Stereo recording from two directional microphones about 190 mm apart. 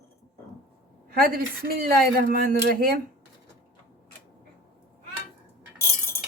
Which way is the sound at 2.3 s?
50° right (ahead or behind).